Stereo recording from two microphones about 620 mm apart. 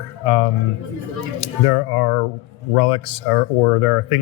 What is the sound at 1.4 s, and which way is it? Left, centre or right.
Speech, left.